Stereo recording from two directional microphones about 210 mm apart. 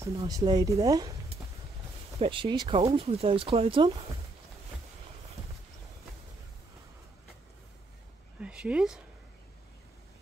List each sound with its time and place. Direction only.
0.2 s speech: 20° right (ahead or behind)
2.1 s speech: 25° right (ahead or behind)
8.4 s speech: 5° right (ahead or behind)